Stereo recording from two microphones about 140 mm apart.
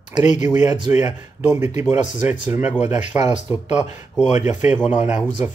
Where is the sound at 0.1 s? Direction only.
60° left (ahead or behind).